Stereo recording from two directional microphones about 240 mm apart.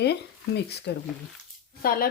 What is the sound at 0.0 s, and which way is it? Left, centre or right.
Speech, left.